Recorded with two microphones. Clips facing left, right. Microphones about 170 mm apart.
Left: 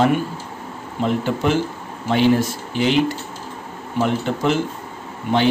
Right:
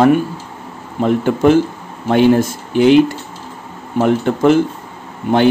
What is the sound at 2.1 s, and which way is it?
Speech, 50° right (ahead or behind).